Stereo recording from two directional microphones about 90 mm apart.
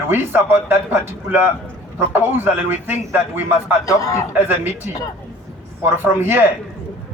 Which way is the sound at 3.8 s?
40° left (ahead or behind).